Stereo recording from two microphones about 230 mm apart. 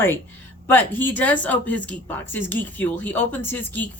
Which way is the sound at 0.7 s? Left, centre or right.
Centre.